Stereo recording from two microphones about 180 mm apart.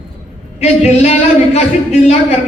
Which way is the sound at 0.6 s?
35° left (ahead or behind).